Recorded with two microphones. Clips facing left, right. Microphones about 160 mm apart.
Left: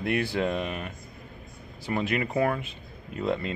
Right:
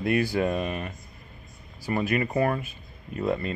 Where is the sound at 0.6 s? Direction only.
10° left (ahead or behind).